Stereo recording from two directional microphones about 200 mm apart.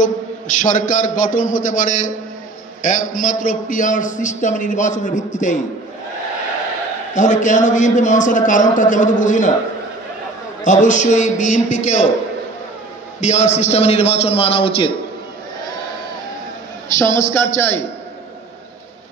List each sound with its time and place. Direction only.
0.0 s a man's voice: 40° left (ahead or behind)
7.2 s a man's voice: 40° left (ahead or behind)
10.6 s a man's voice: 40° left (ahead or behind)
13.2 s a man's voice: 35° left (ahead or behind)
16.9 s a man's voice: 15° left (ahead or behind)